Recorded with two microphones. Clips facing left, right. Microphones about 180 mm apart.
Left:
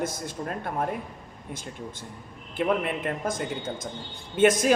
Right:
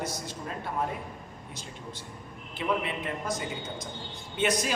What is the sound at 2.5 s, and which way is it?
Speech, 50° left (ahead or behind).